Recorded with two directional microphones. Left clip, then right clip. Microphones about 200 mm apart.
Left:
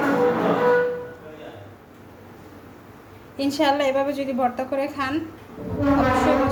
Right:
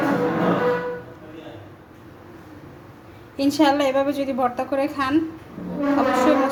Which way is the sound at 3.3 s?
10° right (ahead or behind).